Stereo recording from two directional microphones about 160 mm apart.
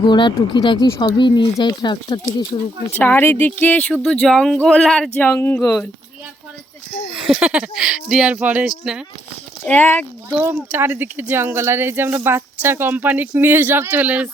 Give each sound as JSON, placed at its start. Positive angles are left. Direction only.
{"t": 0.0, "sound": "speech", "side_deg": 30}
{"t": 2.9, "sound": "speech", "side_deg": 10}
{"t": 7.1, "sound": "speech", "side_deg": -5}
{"t": 9.6, "sound": "speech", "side_deg": 10}
{"t": 10.4, "sound": "speech", "side_deg": -10}